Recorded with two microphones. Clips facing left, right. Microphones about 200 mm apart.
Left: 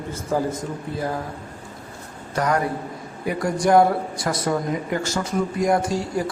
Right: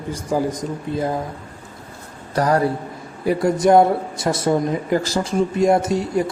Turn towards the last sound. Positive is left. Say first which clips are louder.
# right 4 dB
turn(degrees=-20)  # may be behind; listen again after turning